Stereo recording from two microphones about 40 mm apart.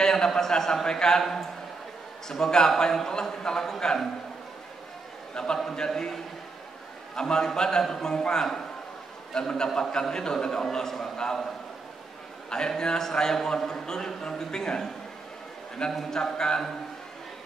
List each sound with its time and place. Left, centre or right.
0.0 s a man's voice: centre
2.2 s a man's voice: centre
5.3 s a man's voice: centre
12.4 s a man's voice: centre
15.9 s a man's voice: centre
16.2 s a man's voice: centre